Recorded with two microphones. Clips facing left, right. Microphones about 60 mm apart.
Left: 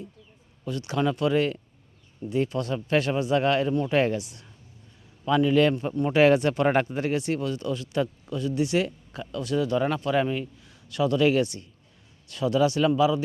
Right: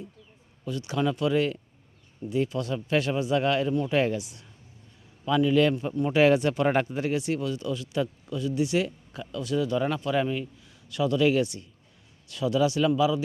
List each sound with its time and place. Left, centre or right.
0.6 s a man's voice: left